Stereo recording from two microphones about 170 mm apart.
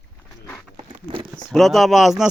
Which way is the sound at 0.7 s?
35° right (ahead or behind).